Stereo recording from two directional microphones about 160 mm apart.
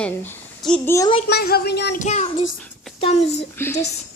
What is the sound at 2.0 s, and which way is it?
Speech, 45° left (ahead or behind).